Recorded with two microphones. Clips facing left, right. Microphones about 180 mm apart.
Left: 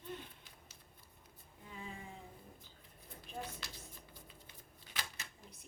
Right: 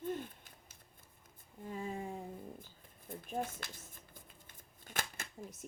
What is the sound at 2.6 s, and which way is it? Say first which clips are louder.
Typing: right 3 dB; 50° right (ahead or behind).